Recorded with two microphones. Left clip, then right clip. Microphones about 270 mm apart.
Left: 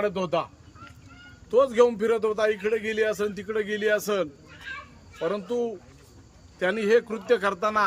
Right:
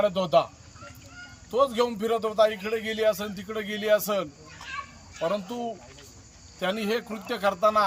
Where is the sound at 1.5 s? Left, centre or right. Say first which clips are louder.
Left 4 dB; centre.